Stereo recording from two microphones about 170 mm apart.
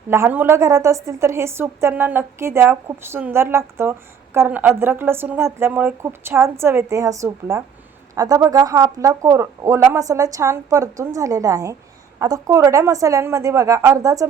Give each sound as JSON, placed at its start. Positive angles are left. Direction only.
{"t": 0.1, "sound": "a woman's voice", "side_deg": -15}